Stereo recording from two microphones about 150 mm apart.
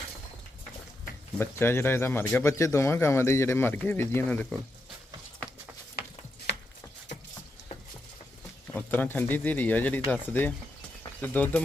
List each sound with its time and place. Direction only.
1.4 s speech: 15° left (ahead or behind)
8.7 s speech: 15° left (ahead or behind)